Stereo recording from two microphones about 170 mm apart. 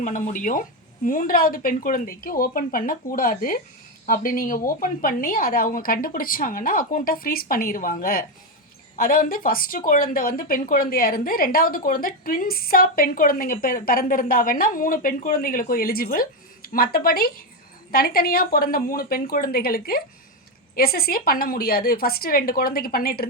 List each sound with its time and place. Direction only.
0.0 s speech: 50° left (ahead or behind)